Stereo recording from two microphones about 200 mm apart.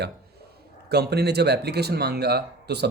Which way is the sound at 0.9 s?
55° right (ahead or behind).